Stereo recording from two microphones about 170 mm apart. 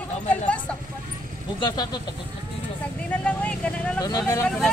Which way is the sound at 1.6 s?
25° left (ahead or behind).